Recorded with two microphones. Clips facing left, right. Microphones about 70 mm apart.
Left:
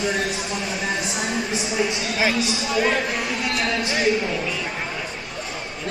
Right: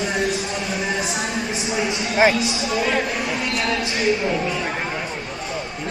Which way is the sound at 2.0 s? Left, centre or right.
Right.